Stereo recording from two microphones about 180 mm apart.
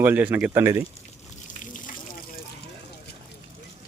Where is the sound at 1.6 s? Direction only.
45° left (ahead or behind).